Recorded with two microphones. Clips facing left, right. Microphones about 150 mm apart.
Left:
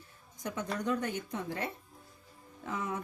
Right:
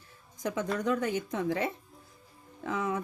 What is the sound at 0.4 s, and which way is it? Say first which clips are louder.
A woman's voice: right 4 dB; 90° right.